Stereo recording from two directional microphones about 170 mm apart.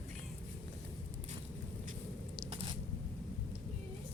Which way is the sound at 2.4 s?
30° right (ahead or behind).